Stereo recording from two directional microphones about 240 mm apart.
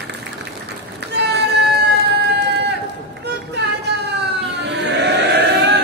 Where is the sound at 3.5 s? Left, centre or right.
Right.